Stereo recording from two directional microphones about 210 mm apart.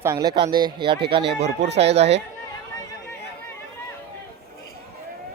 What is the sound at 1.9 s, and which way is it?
Speech, 30° right (ahead or behind).